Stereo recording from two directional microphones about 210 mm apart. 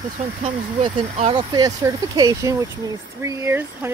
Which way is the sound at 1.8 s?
15° right (ahead or behind).